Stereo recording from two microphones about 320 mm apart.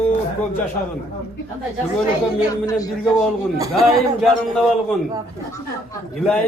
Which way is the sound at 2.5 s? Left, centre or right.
Centre.